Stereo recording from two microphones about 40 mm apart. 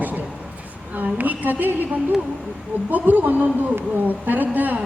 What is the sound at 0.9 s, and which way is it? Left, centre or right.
A woman's voice, right.